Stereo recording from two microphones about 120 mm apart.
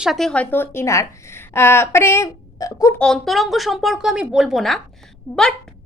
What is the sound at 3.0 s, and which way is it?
A woman's voice, 5° left (ahead or behind).